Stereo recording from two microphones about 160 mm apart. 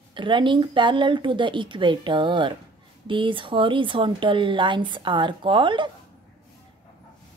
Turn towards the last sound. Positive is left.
turn(degrees=-30)  # may be behind; listen again after turning